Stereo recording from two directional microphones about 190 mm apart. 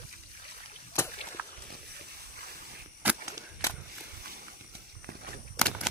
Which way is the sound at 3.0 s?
15° right (ahead or behind).